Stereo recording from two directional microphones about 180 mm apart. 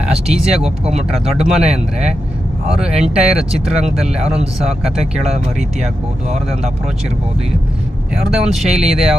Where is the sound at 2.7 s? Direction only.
5° right (ahead or behind).